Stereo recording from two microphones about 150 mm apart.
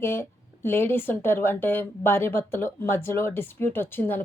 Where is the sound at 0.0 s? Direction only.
15° left (ahead or behind).